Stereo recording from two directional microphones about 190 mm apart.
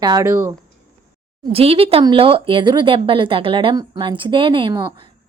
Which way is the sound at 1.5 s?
30° right (ahead or behind).